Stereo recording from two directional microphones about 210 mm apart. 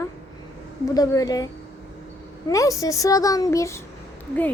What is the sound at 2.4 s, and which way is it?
A child's voice, 15° left (ahead or behind).